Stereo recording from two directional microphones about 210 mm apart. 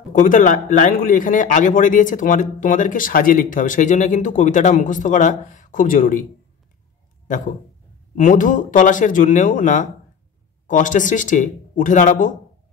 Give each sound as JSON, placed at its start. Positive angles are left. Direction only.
{"t": 0.1, "sound": "a man's voice", "side_deg": 35}
{"t": 7.2, "sound": "a man's voice", "side_deg": 35}